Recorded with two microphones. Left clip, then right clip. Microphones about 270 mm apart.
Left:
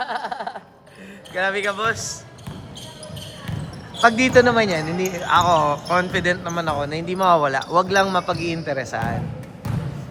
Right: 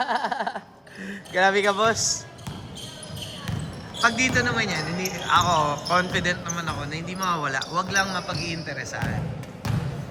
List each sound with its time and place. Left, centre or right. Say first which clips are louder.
0.0 s a sound: right 1 dB; right
1.4 s a man's voice: right 2 dB; right
4.0 s speech: left 7 dB; centre